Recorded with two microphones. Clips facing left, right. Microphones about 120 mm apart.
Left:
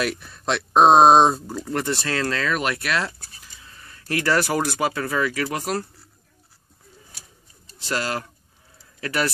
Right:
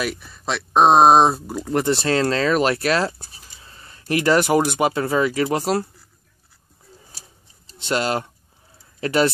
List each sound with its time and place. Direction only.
0.0 s speech: centre (ahead or behind)
1.7 s speech: 25° right (ahead or behind)
7.8 s speech: 25° right (ahead or behind)